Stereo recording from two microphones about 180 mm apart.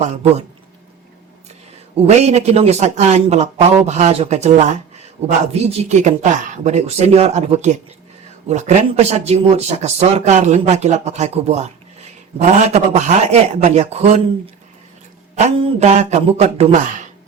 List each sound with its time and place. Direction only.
0.0 s speech: 40° right (ahead or behind)
2.0 s speech: 35° right (ahead or behind)